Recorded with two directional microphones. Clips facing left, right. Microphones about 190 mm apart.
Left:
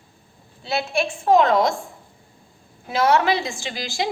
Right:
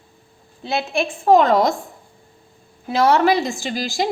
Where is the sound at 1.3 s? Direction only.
40° right (ahead or behind).